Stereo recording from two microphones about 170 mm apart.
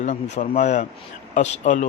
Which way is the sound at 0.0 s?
40° left (ahead or behind).